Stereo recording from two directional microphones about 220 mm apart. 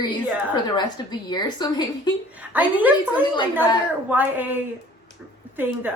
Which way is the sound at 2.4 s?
5° right (ahead or behind).